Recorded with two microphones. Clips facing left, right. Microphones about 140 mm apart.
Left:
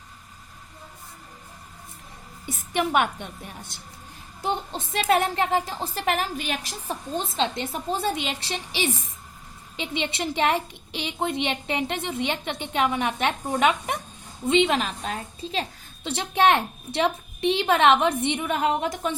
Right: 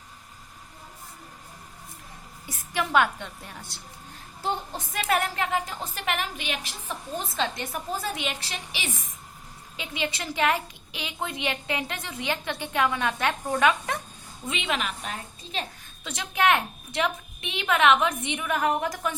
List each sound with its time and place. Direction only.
2.5 s a woman's voice: 20° left (ahead or behind); by 7.2 s 40° left (ahead or behind)
7.2 s a woman's voice: 25° left (ahead or behind)
14.4 s a woman's voice: 30° left (ahead or behind)